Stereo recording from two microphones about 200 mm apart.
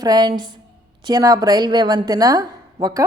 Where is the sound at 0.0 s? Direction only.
20° right (ahead or behind).